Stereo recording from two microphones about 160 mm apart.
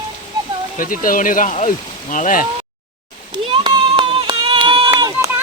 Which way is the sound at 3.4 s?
35° right (ahead or behind).